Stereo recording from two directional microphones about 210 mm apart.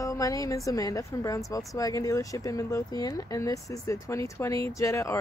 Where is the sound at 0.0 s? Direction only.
15° left (ahead or behind).